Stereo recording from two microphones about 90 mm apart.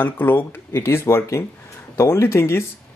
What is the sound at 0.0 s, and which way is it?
Speech, 20° left (ahead or behind).